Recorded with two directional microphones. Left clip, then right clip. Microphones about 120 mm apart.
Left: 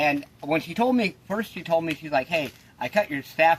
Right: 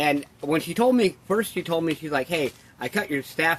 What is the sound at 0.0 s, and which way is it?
Speech, 45° left (ahead or behind).